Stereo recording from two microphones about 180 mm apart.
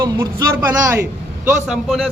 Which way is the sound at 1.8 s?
Centre (ahead or behind).